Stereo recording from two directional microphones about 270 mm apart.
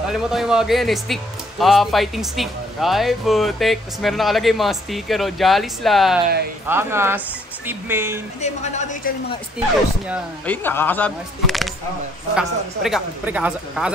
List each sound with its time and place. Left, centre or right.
0.1 s speech: centre
8.4 s a woman's voice: left
10.4 s speech: centre